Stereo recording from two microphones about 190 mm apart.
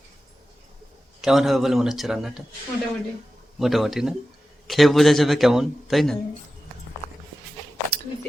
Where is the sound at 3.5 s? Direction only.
Centre (ahead or behind).